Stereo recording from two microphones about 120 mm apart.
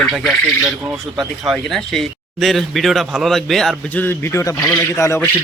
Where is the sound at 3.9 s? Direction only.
15° left (ahead or behind).